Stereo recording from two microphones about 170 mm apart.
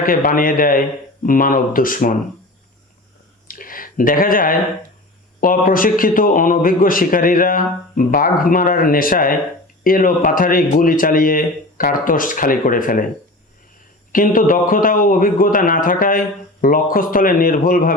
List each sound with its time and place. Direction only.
0.0 s a man's voice: 55° left (ahead or behind)
3.4 s a sound: 55° left (ahead or behind)
5.4 s a man's voice: 55° left (ahead or behind)
14.1 s a man's voice: 55° left (ahead or behind)